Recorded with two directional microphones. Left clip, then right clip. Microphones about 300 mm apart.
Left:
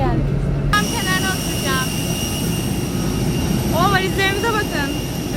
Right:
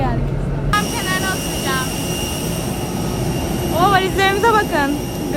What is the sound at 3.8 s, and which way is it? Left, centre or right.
Speech, centre.